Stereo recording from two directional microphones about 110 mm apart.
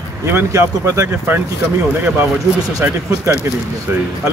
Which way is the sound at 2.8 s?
20° right (ahead or behind).